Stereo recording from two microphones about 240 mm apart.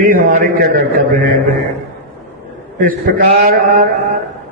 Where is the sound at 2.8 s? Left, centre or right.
Right.